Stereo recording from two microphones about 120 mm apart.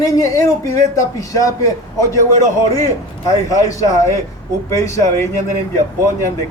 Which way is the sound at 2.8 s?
30° left (ahead or behind).